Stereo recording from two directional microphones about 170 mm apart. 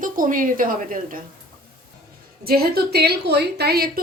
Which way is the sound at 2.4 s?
65° right (ahead or behind).